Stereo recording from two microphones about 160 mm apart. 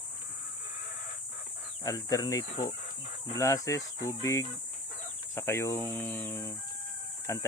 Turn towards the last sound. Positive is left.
turn(degrees=15)  # may be behind; listen again after turning